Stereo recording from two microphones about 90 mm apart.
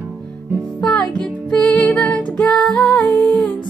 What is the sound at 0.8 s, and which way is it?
Music, 5° left (ahead or behind).